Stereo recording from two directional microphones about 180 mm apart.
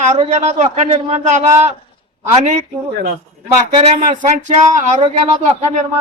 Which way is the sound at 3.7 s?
35° right (ahead or behind).